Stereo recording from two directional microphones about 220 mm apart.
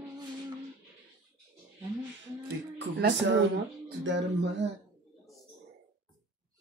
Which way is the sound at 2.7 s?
55° right (ahead or behind).